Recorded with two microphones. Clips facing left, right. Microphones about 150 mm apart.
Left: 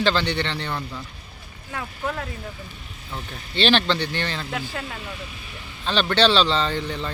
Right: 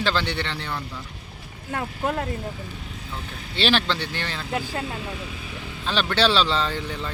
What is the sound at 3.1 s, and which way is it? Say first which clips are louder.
Speech: left 4 dB; 5° right (ahead or behind).